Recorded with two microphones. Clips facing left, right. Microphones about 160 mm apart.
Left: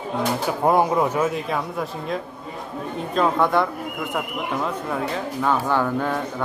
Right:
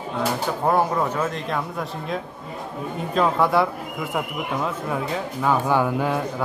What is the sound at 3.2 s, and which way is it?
Speech, 5° right (ahead or behind).